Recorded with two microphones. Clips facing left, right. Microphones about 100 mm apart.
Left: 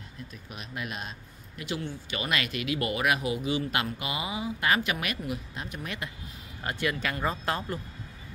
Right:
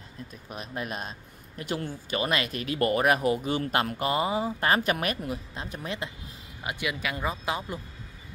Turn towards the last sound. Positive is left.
turn(degrees=-10)  # may be behind; listen again after turning